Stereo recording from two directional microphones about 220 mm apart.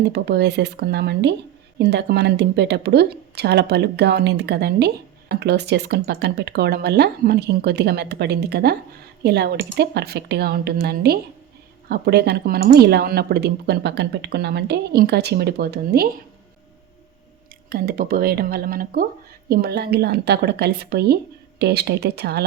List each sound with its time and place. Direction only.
0.1 s speech: 50° right (ahead or behind)
17.7 s speech: 40° right (ahead or behind)